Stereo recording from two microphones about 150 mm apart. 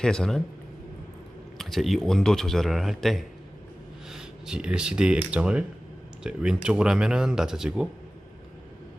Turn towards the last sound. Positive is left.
turn(degrees=-5)  # may be behind; listen again after turning